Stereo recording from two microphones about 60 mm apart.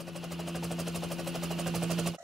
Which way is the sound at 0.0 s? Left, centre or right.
Centre.